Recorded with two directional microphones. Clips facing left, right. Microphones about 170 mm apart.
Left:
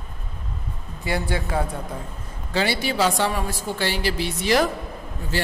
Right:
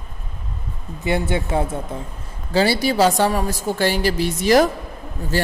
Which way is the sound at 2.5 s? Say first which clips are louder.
Right 6 dB; 35° right (ahead or behind).